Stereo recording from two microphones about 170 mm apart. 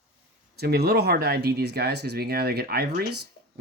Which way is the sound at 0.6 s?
70° right (ahead or behind).